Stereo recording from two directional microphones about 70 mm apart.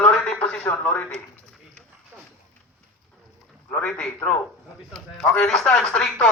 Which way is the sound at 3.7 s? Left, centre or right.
Centre.